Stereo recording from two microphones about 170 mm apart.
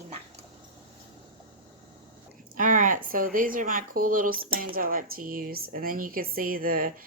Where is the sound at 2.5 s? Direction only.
50° right (ahead or behind).